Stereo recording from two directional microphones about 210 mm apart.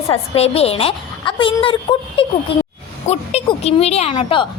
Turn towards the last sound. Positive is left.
turn(degrees=25)  # may be behind; listen again after turning